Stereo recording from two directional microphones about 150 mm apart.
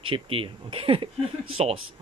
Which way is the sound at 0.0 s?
35° right (ahead or behind).